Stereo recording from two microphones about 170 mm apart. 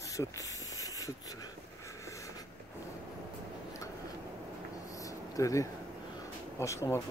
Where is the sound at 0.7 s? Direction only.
20° left (ahead or behind).